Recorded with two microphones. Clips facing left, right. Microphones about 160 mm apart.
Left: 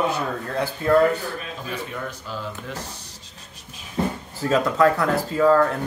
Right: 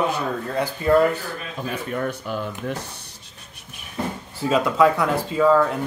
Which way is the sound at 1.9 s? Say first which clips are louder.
Right 6 dB; 55° right (ahead or behind).